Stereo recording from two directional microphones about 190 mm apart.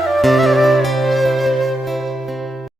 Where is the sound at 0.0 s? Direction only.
Centre (ahead or behind).